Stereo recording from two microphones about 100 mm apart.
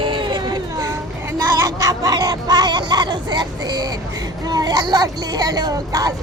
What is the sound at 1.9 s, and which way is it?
Speech, 40° right (ahead or behind).